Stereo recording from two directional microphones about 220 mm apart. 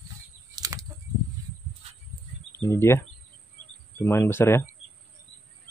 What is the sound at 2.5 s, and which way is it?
Speech, 10° left (ahead or behind).